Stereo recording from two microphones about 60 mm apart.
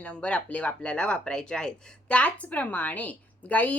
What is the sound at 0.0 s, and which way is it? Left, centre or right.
A woman's voice, centre.